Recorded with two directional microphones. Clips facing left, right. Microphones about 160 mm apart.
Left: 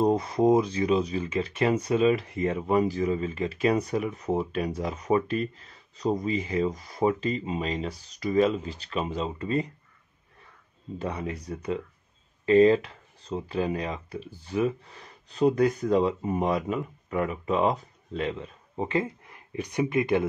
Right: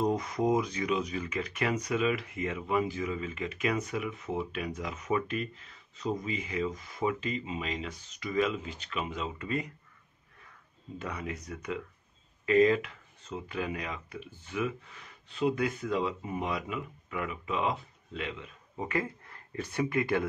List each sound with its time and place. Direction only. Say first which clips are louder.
0.0 s speech: left 6 dB; 30° left (ahead or behind)
11.0 s speech: left 5 dB; 30° left (ahead or behind)